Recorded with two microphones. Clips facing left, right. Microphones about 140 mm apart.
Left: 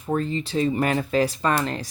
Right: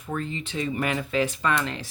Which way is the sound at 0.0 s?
35° left (ahead or behind).